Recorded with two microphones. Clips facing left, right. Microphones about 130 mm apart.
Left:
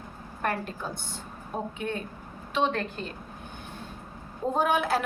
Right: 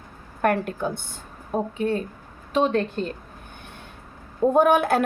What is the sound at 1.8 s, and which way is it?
Speech, 35° right (ahead or behind).